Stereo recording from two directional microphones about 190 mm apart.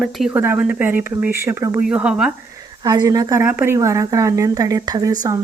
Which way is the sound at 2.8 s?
20° right (ahead or behind).